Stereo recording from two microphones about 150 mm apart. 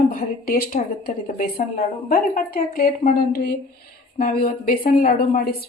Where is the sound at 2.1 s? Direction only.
75° left (ahead or behind).